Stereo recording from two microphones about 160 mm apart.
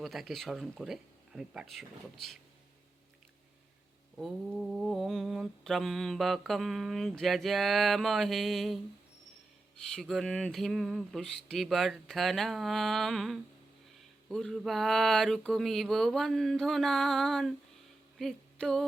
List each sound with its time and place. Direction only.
0.0 s mantra: centre (ahead or behind)
4.2 s mantra: centre (ahead or behind)
9.8 s mantra: centre (ahead or behind)
18.2 s a sound: centre (ahead or behind)